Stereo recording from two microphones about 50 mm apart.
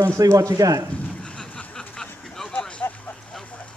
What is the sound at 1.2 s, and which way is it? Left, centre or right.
Rain, centre.